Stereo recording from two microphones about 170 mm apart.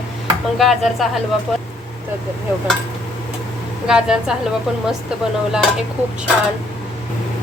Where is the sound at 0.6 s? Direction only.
Centre (ahead or behind).